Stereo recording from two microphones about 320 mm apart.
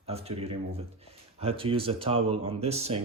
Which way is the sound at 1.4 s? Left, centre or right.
Centre.